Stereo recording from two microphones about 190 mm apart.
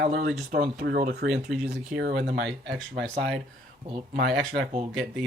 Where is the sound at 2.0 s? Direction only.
60° right (ahead or behind).